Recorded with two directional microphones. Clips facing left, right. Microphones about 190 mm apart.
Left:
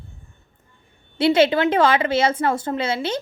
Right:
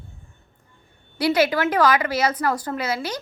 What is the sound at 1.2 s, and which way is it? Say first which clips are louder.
A woman's voice: left 3 dB; 25° left (ahead or behind).